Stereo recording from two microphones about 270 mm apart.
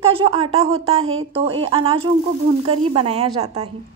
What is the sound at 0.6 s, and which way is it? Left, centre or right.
Speech, right.